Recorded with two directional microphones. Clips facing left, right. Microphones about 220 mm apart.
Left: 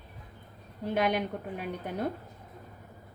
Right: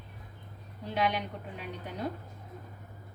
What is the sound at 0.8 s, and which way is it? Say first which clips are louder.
Speech: left 3 dB; 50° left (ahead or behind).